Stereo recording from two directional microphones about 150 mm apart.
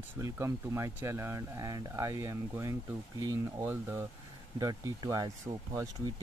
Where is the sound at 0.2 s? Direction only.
20° right (ahead or behind).